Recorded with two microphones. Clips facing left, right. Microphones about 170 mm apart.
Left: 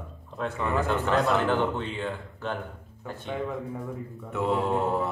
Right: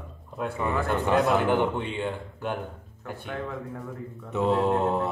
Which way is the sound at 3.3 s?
5° left (ahead or behind).